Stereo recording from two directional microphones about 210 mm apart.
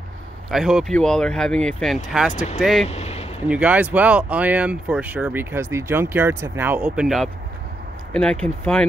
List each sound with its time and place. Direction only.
0.5 s speech: centre (ahead or behind)
2.3 s speech: 30° left (ahead or behind)
2.6 s speech: centre (ahead or behind)
2.9 s a sound: 30° left (ahead or behind)
3.4 s speech: 5° right (ahead or behind)